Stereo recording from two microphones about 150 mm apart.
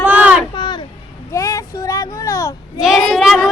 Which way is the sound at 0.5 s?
30° left (ahead or behind).